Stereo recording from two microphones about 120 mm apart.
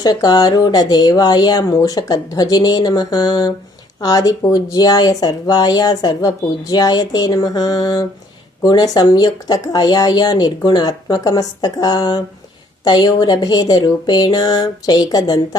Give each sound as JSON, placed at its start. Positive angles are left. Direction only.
{"t": 0.0, "sound": "speech", "side_deg": 35}